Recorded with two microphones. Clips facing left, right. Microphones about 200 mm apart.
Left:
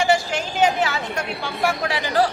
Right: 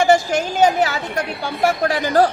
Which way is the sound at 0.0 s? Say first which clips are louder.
Right 5 dB; 45° right (ahead or behind).